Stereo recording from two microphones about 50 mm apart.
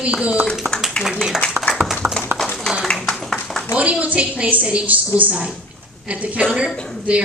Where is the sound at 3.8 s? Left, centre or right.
Right.